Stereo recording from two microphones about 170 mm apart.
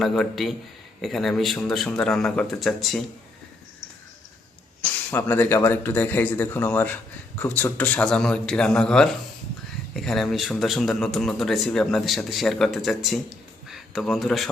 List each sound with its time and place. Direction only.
0.0 s a man's voice: centre (ahead or behind)
5.1 s a man's voice: 10° left (ahead or behind)